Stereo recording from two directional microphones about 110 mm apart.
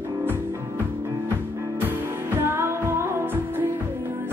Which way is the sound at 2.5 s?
25° right (ahead or behind).